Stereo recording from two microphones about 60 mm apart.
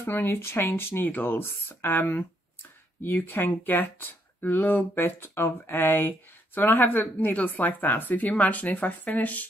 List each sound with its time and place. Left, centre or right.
0.0 s speech: left